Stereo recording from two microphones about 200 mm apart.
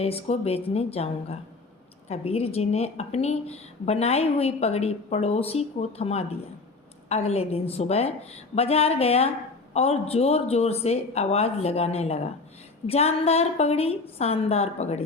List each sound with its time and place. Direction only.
0.0 s a woman's voice: 30° left (ahead or behind)